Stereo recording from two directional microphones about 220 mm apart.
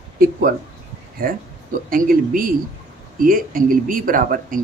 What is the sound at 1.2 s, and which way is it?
Speech, 40° right (ahead or behind).